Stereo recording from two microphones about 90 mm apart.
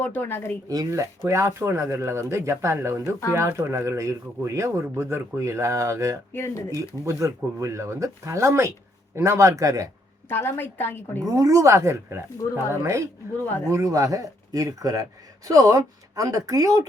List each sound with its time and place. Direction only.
0.0 s a woman's voice: 20° left (ahead or behind)
0.7 s speech: 40° right (ahead or behind)
6.3 s a woman's voice: 30° left (ahead or behind)
6.7 s speech: 35° right (ahead or behind)
10.2 s a woman's voice: 25° left (ahead or behind)
11.2 s speech: 40° right (ahead or behind)